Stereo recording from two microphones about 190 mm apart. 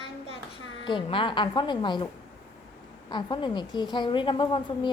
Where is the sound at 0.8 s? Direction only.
25° left (ahead or behind).